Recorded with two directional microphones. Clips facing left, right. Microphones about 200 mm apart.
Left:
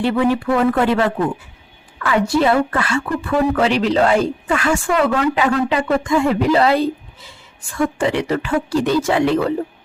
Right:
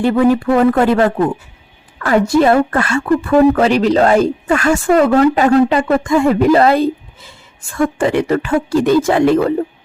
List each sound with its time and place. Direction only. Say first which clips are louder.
0.0 s a woman's voice: right 5 dB; 45° right (ahead or behind)